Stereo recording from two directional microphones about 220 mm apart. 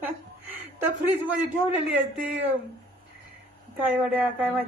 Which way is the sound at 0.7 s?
10° right (ahead or behind).